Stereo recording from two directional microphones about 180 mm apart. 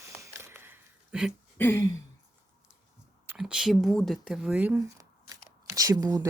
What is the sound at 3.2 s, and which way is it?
Speech, 10° right (ahead or behind).